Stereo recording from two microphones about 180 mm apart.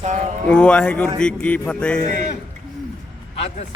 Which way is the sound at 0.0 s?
45° right (ahead or behind).